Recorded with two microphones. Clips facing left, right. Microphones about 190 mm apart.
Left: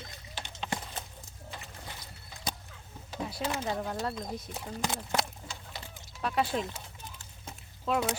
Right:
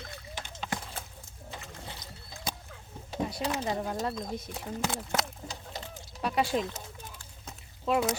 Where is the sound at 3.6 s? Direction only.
5° right (ahead or behind).